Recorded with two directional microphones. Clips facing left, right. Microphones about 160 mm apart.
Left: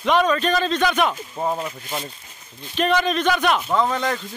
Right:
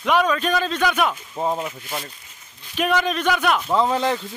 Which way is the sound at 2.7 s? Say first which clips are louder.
Left 1 dB; 10° right (ahead or behind).